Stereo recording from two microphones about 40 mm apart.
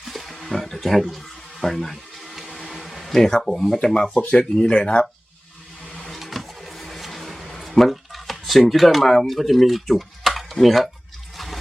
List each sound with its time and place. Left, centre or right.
0.0 s wild animals: centre
1.6 s a sound: centre
3.8 s speech: centre
6.0 s vehicle: centre
7.9 s speech: centre